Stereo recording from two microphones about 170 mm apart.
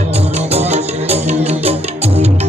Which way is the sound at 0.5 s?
40° right (ahead or behind).